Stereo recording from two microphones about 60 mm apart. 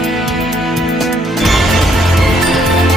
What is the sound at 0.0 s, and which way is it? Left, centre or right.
Music, centre.